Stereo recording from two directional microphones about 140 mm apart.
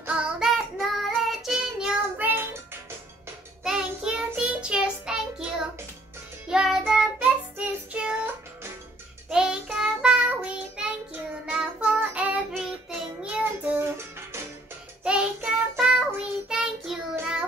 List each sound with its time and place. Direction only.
0.0 s child singing: 10° right (ahead or behind)
3.6 s child singing: 5° right (ahead or behind)
9.3 s child singing: 5° right (ahead or behind)
13.2 s music: 10° right (ahead or behind)
15.0 s child singing: 10° right (ahead or behind)